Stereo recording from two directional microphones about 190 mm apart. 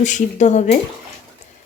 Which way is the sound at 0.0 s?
40° left (ahead or behind).